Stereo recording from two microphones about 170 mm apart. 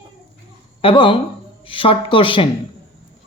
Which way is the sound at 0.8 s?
30° left (ahead or behind).